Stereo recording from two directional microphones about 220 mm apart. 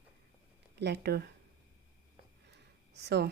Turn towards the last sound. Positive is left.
turn(degrees=-50)  # may be behind; listen again after turning